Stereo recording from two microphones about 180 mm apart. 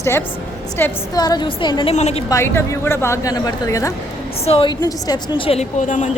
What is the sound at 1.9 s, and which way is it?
Speech, 35° left (ahead or behind).